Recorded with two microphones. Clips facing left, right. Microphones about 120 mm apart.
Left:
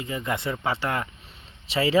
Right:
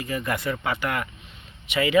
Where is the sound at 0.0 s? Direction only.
20° left (ahead or behind).